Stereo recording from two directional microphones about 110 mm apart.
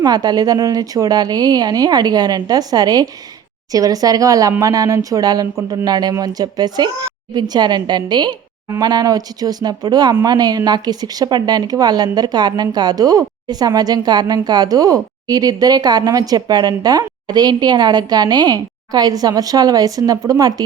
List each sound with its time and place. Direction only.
0.0 s speech: 40° right (ahead or behind)